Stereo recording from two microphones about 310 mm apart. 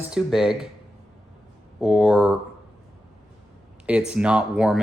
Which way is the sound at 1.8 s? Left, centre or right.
Centre.